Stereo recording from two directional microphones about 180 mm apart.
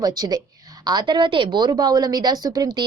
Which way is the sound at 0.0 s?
20° right (ahead or behind).